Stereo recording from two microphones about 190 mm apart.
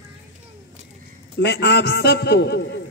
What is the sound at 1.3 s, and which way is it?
A man's voice, 65° left (ahead or behind).